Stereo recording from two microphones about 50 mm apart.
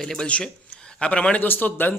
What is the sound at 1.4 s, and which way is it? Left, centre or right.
Speech, left.